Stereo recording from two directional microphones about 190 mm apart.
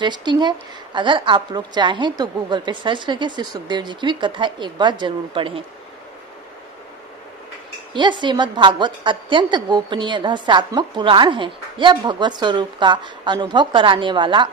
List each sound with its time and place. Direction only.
0.0 s a woman's voice: 25° right (ahead or behind)
7.9 s a woman's voice: 25° right (ahead or behind)